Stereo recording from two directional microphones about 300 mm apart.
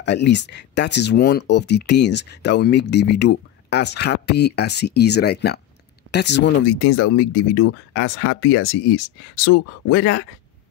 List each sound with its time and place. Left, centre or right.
0.0 s speech: left